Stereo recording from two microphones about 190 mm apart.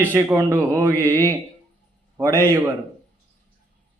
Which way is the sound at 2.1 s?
15° right (ahead or behind).